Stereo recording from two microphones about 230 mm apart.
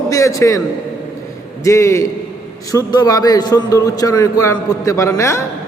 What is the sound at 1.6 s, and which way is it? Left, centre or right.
A man's voice, centre.